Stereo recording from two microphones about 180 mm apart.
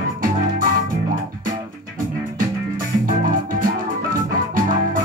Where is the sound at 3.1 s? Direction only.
50° right (ahead or behind).